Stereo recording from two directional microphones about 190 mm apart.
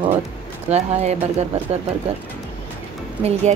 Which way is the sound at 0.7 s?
35° right (ahead or behind).